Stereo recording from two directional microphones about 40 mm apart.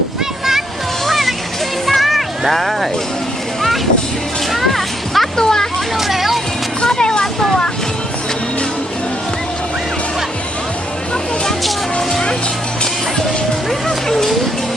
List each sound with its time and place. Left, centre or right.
1.0 s music: centre
4.5 s a sound: centre
5.4 s speech: centre
6.0 s speech: centre
6.8 s a sound: centre
13.8 s music: centre